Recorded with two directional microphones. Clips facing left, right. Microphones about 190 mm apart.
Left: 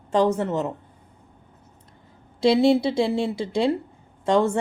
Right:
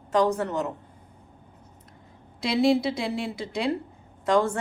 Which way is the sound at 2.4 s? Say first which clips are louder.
Left 4 dB; 25° left (ahead or behind).